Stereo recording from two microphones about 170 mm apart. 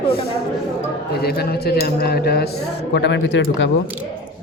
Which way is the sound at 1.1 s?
70° left (ahead or behind).